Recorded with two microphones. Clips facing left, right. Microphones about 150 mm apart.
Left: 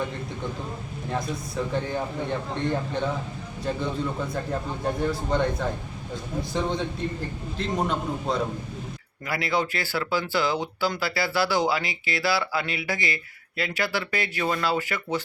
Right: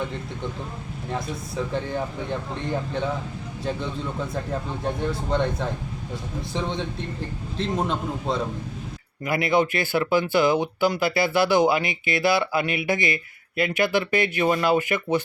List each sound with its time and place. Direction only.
1.1 s speech: centre (ahead or behind)
5.3 s speech: centre (ahead or behind)
9.2 s speech: 20° right (ahead or behind)